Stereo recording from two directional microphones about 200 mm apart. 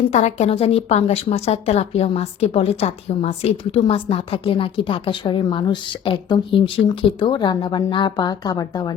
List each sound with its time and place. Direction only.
0.1 s a woman's voice: 35° left (ahead or behind)